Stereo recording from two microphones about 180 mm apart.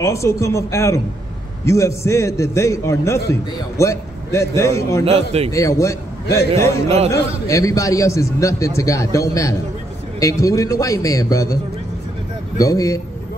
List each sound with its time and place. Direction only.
0.0 s a man's voice: 15° left (ahead or behind)
5.0 s a man's voice: 35° right (ahead or behind)
5.5 s a man's voice: 15° left (ahead or behind)
7.1 s a man's voice: 15° left (ahead or behind)
12.5 s a man's voice: 20° left (ahead or behind)